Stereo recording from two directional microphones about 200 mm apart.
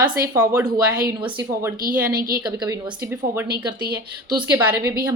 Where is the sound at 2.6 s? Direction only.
10° right (ahead or behind).